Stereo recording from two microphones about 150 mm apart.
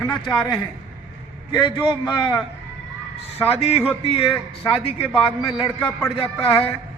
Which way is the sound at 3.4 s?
40° left (ahead or behind).